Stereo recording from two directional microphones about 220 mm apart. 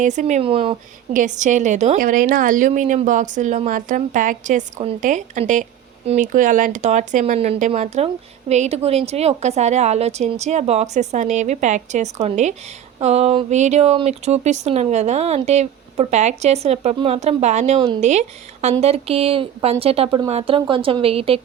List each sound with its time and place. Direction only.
0.0 s speech: 35° right (ahead or behind)